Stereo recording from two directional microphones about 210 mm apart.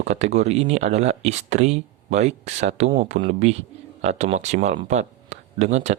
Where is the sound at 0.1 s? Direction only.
30° right (ahead or behind).